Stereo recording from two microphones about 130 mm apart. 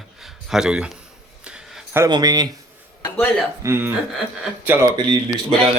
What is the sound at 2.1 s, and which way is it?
Speech, 30° right (ahead or behind).